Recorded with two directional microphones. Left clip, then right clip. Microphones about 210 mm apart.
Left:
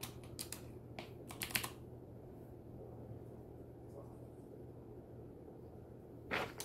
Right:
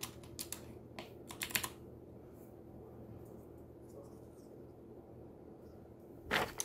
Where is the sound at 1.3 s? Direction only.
15° right (ahead or behind).